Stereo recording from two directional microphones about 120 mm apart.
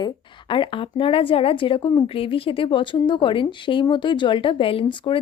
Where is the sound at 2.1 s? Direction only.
50° left (ahead or behind).